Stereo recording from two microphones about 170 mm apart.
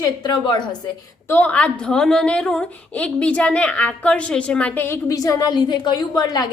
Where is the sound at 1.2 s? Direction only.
10° left (ahead or behind).